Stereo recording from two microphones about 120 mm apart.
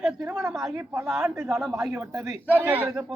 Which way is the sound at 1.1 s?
Centre (ahead or behind).